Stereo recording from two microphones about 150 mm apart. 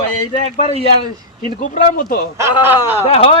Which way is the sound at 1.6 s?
65° left (ahead or behind).